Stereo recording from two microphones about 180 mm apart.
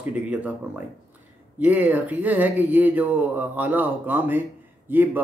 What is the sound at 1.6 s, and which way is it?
Speech, 10° right (ahead or behind).